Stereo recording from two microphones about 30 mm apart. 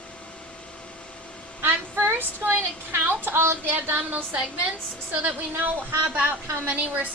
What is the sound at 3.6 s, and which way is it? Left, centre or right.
Speech, right.